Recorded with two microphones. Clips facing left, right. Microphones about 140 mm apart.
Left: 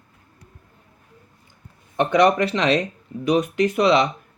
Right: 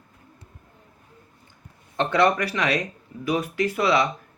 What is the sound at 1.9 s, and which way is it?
Speech, 20° left (ahead or behind).